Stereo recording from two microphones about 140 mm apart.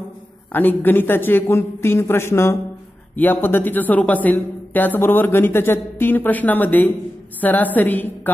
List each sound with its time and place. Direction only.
0.5 s speech: 15° left (ahead or behind)